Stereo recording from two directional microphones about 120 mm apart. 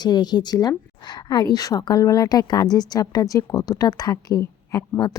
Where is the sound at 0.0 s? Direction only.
35° left (ahead or behind).